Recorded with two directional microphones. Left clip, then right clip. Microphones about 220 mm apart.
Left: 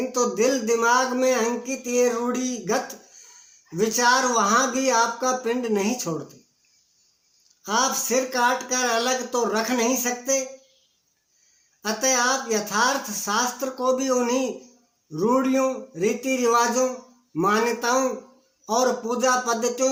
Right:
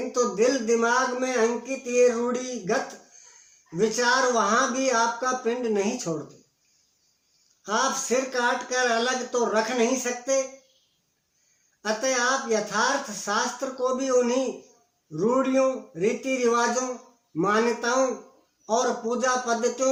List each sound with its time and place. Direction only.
0.1 s speech: 35° left (ahead or behind)
3.8 s speech: 35° left (ahead or behind)
7.6 s speech: 35° left (ahead or behind)
11.8 s speech: 35° left (ahead or behind)